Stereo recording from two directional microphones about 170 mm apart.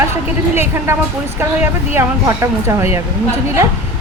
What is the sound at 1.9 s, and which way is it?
Speech, 15° right (ahead or behind).